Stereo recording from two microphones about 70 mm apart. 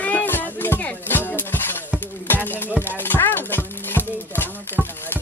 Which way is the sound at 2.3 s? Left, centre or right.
Left.